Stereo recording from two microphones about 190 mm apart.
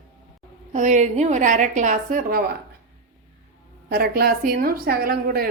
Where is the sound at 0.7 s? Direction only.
40° right (ahead or behind).